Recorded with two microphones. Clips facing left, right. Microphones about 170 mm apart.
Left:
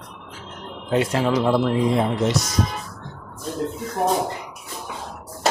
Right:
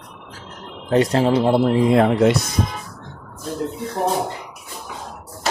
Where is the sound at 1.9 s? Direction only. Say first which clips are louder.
Right 6 dB; 70° right (ahead or behind).